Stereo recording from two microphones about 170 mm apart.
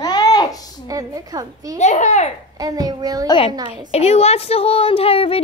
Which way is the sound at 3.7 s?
35° left (ahead or behind).